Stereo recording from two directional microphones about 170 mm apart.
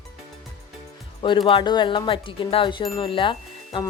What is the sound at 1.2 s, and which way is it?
Speech, 30° left (ahead or behind).